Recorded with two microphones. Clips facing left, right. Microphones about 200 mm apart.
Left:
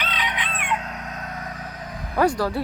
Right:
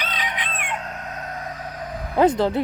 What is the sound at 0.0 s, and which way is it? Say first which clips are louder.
Chicken: even; 40° right (ahead or behind).